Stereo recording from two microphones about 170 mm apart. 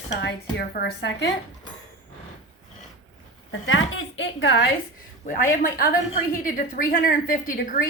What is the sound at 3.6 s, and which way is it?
A woman's voice, 90° left.